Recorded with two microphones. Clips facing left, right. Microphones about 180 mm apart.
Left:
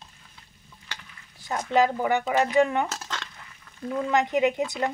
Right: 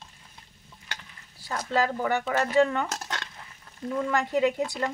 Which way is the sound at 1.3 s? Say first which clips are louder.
Left 4 dB; 20° left (ahead or behind).